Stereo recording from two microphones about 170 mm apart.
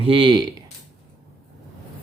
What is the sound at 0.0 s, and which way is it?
Speech, 30° right (ahead or behind).